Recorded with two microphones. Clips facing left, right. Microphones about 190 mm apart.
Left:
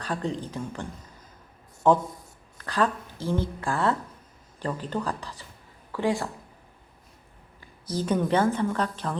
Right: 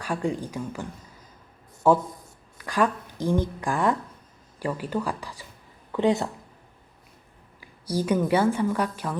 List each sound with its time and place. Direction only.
0.0 s a woman's voice: 10° right (ahead or behind)
7.6 s a woman's voice: 10° right (ahead or behind)